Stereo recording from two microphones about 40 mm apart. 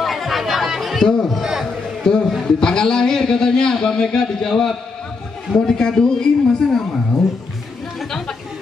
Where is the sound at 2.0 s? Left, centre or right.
Centre.